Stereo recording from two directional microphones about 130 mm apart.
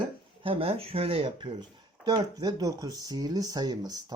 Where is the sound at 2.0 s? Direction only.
30° right (ahead or behind).